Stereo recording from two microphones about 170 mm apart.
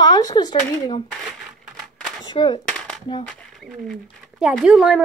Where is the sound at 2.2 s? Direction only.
25° left (ahead or behind).